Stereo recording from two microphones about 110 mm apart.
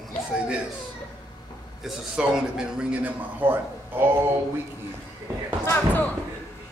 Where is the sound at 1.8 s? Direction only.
5° right (ahead or behind).